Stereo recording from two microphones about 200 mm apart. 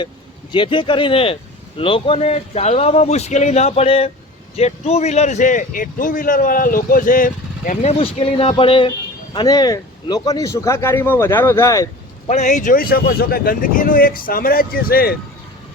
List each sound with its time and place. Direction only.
0.5 s speech: 25° left (ahead or behind)
12.3 s speech: 35° left (ahead or behind)